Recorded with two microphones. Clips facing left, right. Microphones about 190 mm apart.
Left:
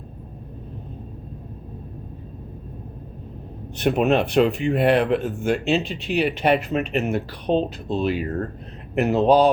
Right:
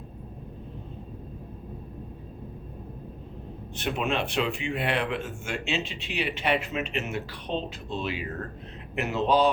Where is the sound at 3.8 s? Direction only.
45° left (ahead or behind).